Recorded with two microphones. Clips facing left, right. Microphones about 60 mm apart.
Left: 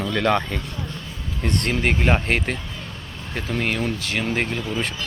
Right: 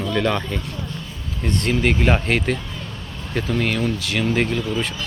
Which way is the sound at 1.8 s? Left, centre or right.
Left.